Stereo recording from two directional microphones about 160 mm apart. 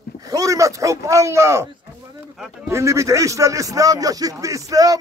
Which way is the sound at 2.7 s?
20° right (ahead or behind).